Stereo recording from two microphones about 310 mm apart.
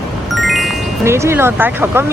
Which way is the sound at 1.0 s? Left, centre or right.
Centre.